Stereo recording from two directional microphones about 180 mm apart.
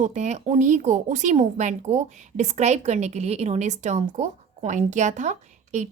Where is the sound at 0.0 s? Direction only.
40° right (ahead or behind).